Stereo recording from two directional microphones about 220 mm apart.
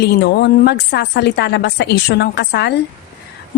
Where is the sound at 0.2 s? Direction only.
50° left (ahead or behind).